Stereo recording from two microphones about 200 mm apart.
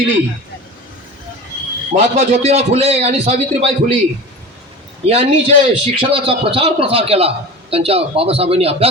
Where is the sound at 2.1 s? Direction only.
30° right (ahead or behind).